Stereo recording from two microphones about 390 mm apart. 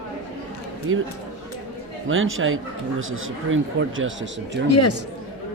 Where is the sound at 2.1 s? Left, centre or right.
Right.